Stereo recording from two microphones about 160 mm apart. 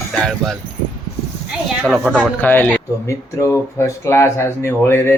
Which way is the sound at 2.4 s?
10° left (ahead or behind).